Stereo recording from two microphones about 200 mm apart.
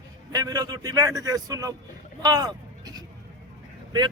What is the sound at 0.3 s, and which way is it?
A man's voice, 20° right (ahead or behind).